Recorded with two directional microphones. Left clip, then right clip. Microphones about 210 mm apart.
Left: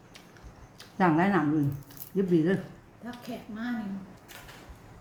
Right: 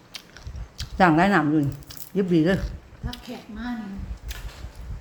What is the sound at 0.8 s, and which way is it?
Speech, 50° right (ahead or behind).